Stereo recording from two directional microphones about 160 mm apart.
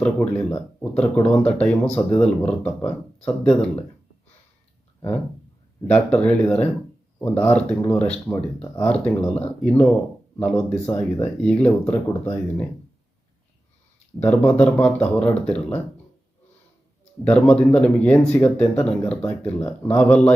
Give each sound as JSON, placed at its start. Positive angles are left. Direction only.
{"t": 0.0, "sound": "speech", "side_deg": 10}
{"t": 5.9, "sound": "speech", "side_deg": 5}
{"t": 14.5, "sound": "speech", "side_deg": 5}
{"t": 17.2, "sound": "speech", "side_deg": 10}